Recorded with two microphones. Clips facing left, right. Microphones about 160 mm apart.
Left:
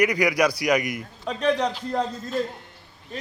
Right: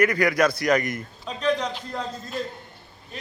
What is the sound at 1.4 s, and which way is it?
Speech, 65° left (ahead or behind).